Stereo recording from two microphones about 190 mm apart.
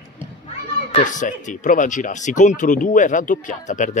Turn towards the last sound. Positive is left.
turn(degrees=40)  # may be behind; listen again after turning